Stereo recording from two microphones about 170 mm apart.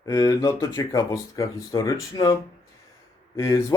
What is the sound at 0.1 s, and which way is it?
A man's voice, 20° left (ahead or behind).